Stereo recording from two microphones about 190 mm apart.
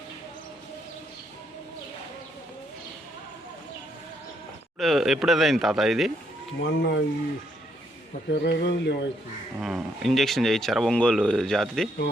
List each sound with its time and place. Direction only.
4.8 s speech: centre (ahead or behind)
6.7 s speech: 65° left (ahead or behind)
8.3 s speech: 65° left (ahead or behind)
9.6 s speech: centre (ahead or behind)